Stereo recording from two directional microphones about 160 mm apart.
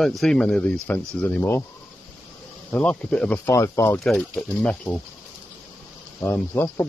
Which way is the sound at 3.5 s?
20° left (ahead or behind).